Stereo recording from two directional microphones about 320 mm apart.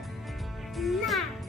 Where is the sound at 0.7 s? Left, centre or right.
Centre.